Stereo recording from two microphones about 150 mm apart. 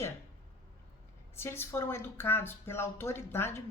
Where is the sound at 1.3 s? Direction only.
15° left (ahead or behind).